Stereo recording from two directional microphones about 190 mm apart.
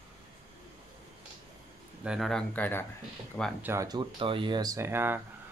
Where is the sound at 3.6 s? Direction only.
15° right (ahead or behind).